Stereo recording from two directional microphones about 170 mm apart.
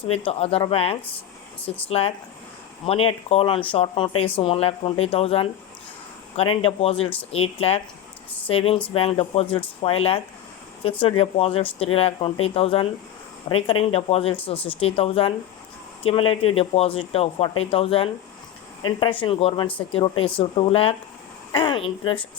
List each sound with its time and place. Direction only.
0.3 s speech: 35° left (ahead or behind)